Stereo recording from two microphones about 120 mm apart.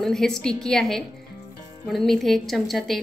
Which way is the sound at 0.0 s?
5° left (ahead or behind).